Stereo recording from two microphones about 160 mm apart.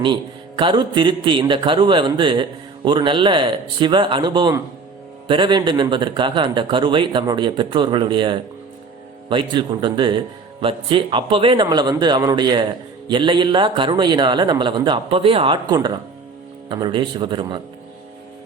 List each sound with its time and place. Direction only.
0.0 s speech: 30° right (ahead or behind)